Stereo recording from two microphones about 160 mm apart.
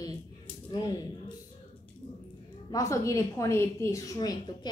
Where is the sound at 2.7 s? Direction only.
20° left (ahead or behind).